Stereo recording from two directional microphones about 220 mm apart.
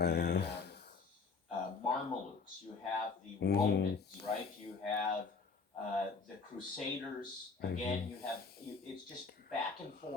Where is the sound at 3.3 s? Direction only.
45° left (ahead or behind).